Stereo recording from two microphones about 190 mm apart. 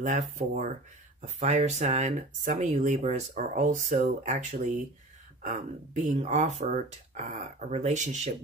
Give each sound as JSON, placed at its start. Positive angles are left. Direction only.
{"t": 0.0, "sound": "speech", "side_deg": -40}